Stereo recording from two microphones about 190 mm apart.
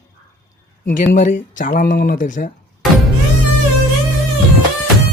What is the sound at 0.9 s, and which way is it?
Speech, 40° left (ahead or behind).